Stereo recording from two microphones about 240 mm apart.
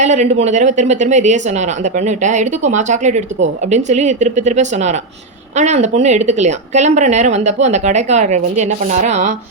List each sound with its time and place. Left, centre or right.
0.0 s speech: right